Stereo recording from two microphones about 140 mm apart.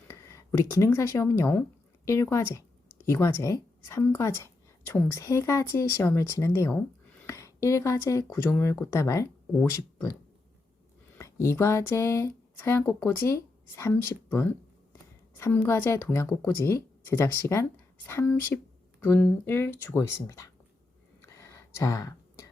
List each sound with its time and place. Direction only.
0.1 s speech: 20° left (ahead or behind)
11.2 s speech: 20° left (ahead or behind)
21.2 s a sound: 20° left (ahead or behind)